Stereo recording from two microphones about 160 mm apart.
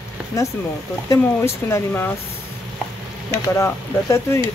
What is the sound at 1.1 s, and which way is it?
Speech, 15° left (ahead or behind).